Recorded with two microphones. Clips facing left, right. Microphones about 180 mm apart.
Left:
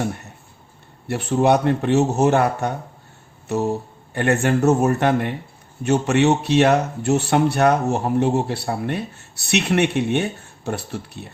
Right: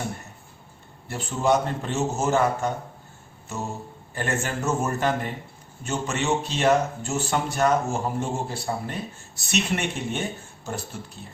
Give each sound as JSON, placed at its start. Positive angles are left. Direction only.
{"t": 1.0, "sound": "speech", "side_deg": 65}